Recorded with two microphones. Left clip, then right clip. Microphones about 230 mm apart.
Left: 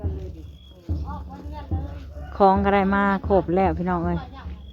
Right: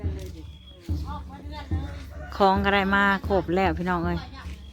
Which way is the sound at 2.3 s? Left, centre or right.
Centre.